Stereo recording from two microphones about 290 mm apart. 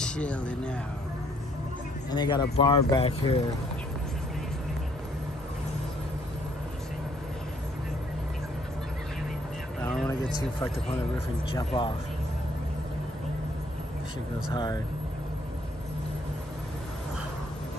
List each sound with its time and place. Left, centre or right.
0.0 s speech: centre
2.0 s speech: centre
10.0 s speech: centre
14.5 s speech: centre